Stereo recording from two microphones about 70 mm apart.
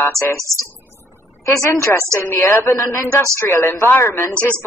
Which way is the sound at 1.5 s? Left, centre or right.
Left.